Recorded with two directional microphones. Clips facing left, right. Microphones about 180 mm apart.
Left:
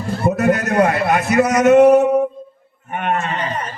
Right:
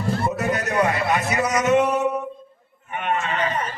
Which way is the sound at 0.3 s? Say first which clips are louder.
Left 7 dB; 55° left (ahead or behind).